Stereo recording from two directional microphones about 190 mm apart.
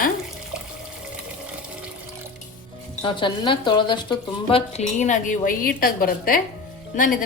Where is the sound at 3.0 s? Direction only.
25° left (ahead or behind); by 6.4 s 50° left (ahead or behind).